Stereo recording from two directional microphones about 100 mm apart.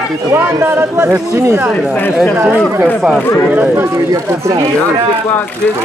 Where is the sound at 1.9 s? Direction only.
20° left (ahead or behind).